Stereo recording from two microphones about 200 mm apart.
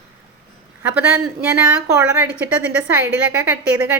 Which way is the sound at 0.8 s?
10° right (ahead or behind).